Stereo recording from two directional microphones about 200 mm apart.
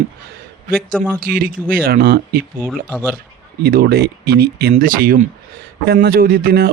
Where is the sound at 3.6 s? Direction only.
50° right (ahead or behind).